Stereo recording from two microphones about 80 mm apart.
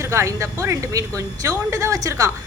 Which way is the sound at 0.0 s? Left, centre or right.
Right.